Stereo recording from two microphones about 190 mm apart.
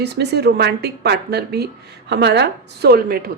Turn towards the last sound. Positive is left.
turn(degrees=-55)  # may be behind; listen again after turning